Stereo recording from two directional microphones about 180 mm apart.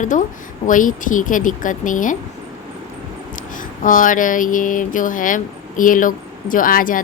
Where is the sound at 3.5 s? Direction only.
50° left (ahead or behind).